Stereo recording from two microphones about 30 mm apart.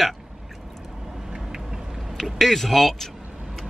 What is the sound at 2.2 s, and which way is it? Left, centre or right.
Speech, centre.